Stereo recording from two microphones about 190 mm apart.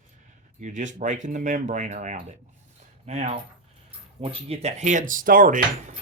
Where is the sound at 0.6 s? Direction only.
40° right (ahead or behind).